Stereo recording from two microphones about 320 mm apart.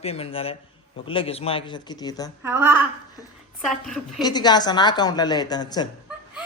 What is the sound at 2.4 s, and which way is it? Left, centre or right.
A woman's voice, centre.